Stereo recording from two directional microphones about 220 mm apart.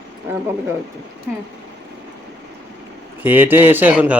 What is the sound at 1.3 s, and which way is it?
Speech, 10° right (ahead or behind).